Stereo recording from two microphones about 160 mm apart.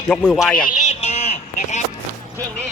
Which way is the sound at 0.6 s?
55° left (ahead or behind).